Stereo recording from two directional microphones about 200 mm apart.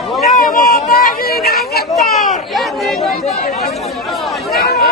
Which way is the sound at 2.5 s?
Centre (ahead or behind).